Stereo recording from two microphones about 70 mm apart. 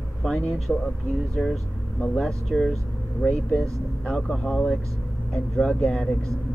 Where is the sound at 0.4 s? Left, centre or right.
Centre.